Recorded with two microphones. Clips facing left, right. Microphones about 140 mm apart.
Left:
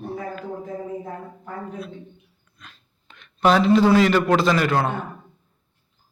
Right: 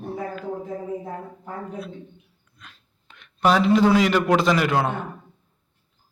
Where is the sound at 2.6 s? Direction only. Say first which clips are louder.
Left 1 dB; 10° right (ahead or behind).